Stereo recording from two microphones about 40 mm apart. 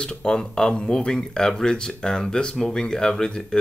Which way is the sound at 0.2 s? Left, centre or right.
Left.